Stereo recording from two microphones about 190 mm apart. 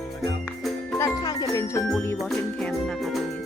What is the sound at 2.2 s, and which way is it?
Speech, centre (ahead or behind).